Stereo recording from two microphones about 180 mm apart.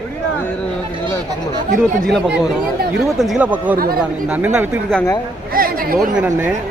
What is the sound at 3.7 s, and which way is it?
Speech, 55° right (ahead or behind).